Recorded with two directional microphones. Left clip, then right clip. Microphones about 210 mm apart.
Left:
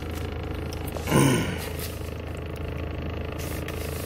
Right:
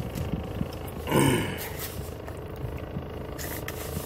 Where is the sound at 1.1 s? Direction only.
Centre (ahead or behind).